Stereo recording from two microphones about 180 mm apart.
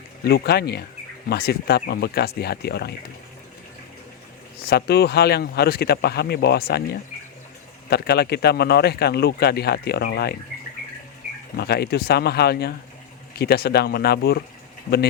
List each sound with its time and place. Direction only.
0.3 s speech: 65° left (ahead or behind)
4.6 s speech: 60° left (ahead or behind)
7.9 s speech: 65° left (ahead or behind)
11.5 s speech: 65° left (ahead or behind)